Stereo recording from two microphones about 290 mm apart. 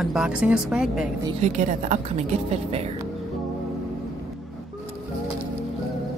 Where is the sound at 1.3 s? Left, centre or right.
Right.